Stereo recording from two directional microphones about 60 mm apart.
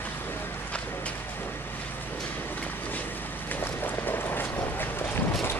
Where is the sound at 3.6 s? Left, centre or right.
Left.